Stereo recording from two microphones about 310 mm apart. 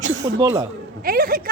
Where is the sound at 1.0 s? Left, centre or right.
Right.